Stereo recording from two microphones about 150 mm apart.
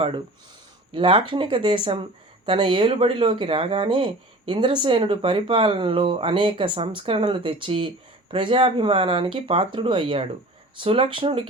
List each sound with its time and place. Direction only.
0.9 s speech: 35° right (ahead or behind)